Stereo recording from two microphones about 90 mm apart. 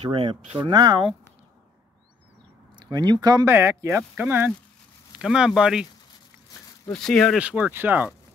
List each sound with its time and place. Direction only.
0.0 s speech: 90° right; by 1.0 s 55° right (ahead or behind)
2.7 s speech: 55° right (ahead or behind)
3.4 s speech: 30° right (ahead or behind)
5.2 s speech: 5° right (ahead or behind)
6.9 s speech: 5° left (ahead or behind)
7.3 s speech: 15° right (ahead or behind)